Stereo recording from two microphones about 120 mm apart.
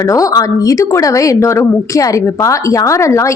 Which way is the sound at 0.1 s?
30° left (ahead or behind).